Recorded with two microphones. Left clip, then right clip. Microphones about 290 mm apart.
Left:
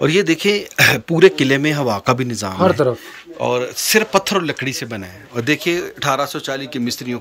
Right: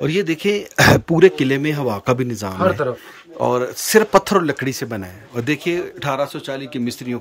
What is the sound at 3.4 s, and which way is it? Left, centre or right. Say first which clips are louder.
Speech: even; centre.